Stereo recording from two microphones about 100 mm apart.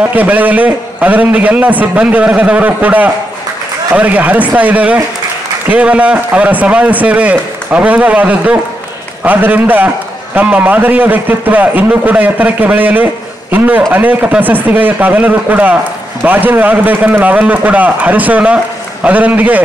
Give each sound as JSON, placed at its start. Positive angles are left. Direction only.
{"t": 0.0, "sound": "a man's voice", "side_deg": -15}